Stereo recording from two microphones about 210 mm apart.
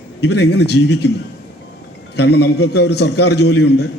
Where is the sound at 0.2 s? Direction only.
50° left (ahead or behind).